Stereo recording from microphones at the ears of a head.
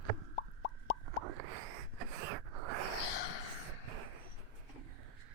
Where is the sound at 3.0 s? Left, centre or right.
Left.